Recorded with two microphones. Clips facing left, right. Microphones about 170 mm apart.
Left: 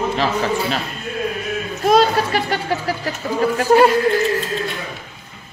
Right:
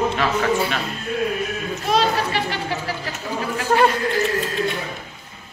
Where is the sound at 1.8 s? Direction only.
45° left (ahead or behind).